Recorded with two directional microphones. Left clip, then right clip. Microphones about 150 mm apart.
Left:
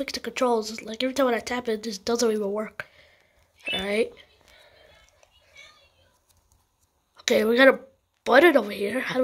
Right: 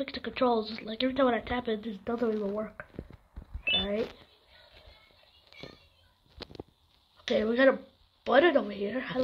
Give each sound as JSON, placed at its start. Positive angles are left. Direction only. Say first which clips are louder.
{"t": 0.0, "sound": "speech", "louder": "left 4 dB", "side_deg": 20}
{"t": 7.2, "sound": "speech", "louder": "left 7 dB", "side_deg": 25}